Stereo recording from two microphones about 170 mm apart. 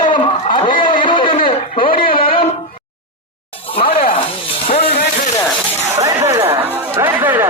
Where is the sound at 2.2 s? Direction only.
30° left (ahead or behind).